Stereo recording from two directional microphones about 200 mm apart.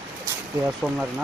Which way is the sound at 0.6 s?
5° right (ahead or behind).